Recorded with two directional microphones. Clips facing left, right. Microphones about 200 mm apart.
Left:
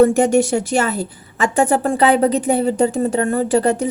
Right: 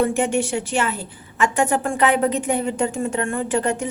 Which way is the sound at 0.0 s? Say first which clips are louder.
Left 7 dB; 40° left (ahead or behind).